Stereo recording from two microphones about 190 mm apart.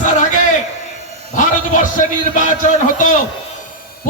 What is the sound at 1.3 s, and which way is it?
Speech, 40° left (ahead or behind).